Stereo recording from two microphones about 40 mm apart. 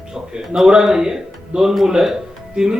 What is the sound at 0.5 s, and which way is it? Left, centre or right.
A man's voice, centre.